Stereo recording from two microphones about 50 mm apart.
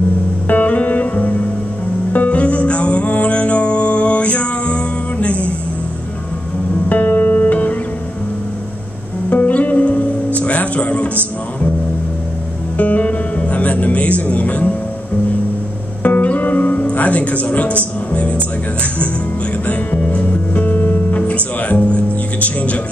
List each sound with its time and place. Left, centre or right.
0.5 s music: left
6.9 s music: left
9.3 s music: left
12.7 s music: left
16.0 s music: left